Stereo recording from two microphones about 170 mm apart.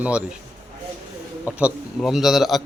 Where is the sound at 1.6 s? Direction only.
5° right (ahead or behind).